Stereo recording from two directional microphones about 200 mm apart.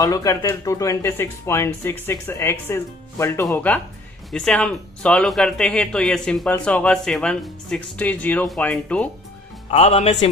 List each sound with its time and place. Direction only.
0.0 s speech: 15° left (ahead or behind)
9.6 s speech: 30° left (ahead or behind)